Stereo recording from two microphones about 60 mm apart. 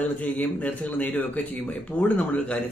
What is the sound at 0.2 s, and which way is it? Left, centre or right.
A man's voice, left.